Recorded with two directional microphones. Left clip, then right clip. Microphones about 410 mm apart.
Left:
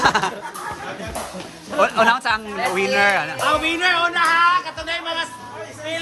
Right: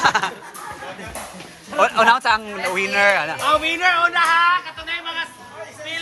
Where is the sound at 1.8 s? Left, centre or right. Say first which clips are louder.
Right 1 dB; centre.